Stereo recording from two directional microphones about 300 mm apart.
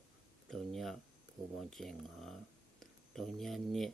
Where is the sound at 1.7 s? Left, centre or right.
Centre.